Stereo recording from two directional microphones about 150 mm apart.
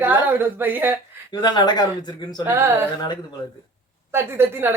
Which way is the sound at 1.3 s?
30° left (ahead or behind).